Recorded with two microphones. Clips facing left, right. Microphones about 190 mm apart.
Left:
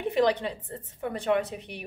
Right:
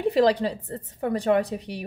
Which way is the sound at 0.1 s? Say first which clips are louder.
Right 2 dB; 35° right (ahead or behind).